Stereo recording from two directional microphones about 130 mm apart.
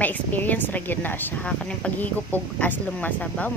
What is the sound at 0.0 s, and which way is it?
A woman's voice, 15° left (ahead or behind).